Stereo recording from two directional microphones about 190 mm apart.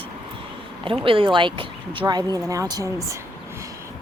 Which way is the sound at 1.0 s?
30° right (ahead or behind).